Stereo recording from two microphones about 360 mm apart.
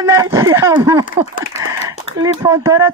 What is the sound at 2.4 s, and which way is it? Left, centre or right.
Speech, centre.